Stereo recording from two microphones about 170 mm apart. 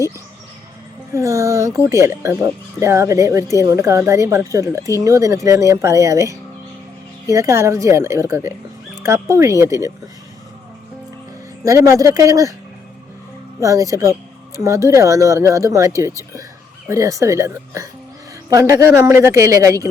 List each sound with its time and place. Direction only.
1.1 s speech: 15° right (ahead or behind)
11.6 s speech: 15° right (ahead or behind)
13.6 s speech: 20° right (ahead or behind)